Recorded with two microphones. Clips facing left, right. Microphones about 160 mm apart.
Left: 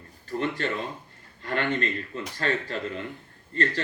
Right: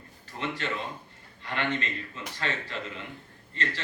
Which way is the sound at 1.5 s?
40° left (ahead or behind).